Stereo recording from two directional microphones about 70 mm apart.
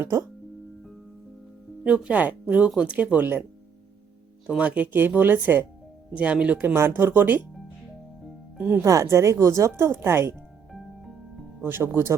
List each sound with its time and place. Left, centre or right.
1.8 s speech: centre
4.4 s speech: centre
6.1 s speech: centre
6.7 s speech: right
8.5 s speech: right
8.8 s a woman's voice: right
10.7 s music: centre
11.6 s speech: right